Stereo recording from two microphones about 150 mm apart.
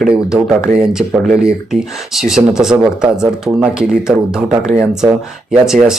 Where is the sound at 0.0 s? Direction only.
5° right (ahead or behind).